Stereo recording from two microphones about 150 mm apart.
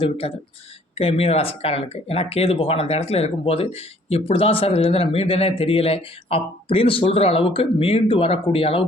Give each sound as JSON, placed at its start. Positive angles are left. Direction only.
{"t": 0.0, "sound": "speech", "side_deg": 40}